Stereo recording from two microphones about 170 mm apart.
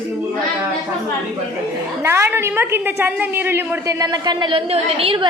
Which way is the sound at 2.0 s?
15° right (ahead or behind).